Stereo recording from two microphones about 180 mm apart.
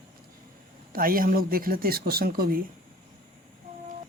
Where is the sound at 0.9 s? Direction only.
55° right (ahead or behind).